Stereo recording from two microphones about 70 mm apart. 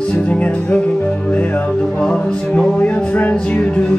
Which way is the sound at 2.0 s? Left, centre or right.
Centre.